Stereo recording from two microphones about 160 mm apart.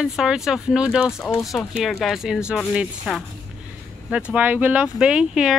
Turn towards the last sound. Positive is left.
turn(degrees=-5)  # may be behind; listen again after turning